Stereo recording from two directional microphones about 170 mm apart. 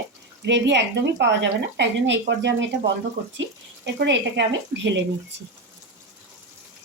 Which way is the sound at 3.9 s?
90° right.